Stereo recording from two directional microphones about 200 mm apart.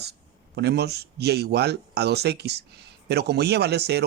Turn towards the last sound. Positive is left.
turn(degrees=-55)  # may be behind; listen again after turning